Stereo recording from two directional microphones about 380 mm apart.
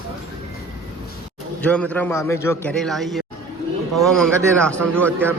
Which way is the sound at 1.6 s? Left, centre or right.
Centre.